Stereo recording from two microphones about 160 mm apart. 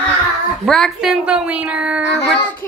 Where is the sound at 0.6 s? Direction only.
Centre (ahead or behind).